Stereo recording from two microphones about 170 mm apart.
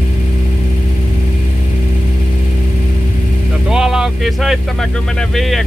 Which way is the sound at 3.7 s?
5° right (ahead or behind).